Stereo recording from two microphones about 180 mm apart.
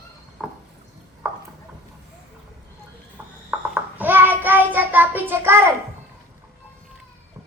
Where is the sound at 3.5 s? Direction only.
10° right (ahead or behind).